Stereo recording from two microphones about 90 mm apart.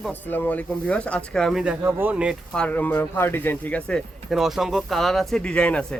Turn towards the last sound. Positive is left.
turn(degrees=15)  # may be behind; listen again after turning